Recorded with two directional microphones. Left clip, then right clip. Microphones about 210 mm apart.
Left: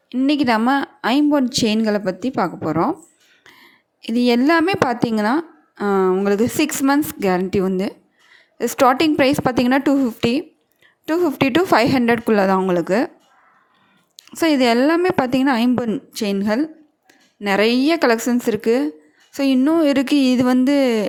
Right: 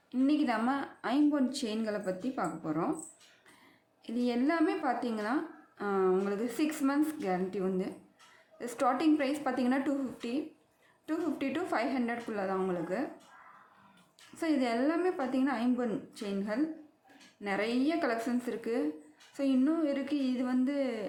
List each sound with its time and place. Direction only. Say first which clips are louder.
0.1 s a woman's voice: left 12 dB; 45° left (ahead or behind)
4.0 s a woman's voice: left 15 dB; 45° left (ahead or behind)
14.3 s a woman's voice: left 15 dB; 45° left (ahead or behind)